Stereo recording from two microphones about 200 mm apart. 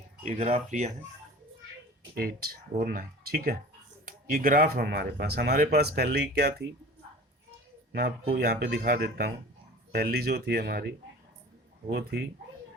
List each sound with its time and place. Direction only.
0.3 s speech: 35° right (ahead or behind)
2.1 s speech: 50° right (ahead or behind)
8.3 s speech: 50° right (ahead or behind)
11.9 s speech: 55° right (ahead or behind)